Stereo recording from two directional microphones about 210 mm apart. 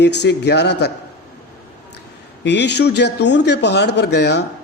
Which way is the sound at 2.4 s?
55° left (ahead or behind).